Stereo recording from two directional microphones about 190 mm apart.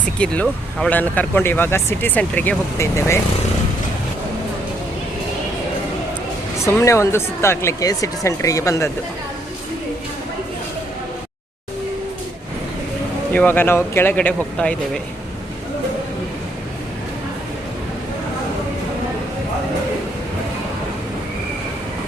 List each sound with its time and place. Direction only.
0.2 s speech: 5° left (ahead or behind)
6.7 s speech: 15° left (ahead or behind)
13.3 s speech: 10° left (ahead or behind)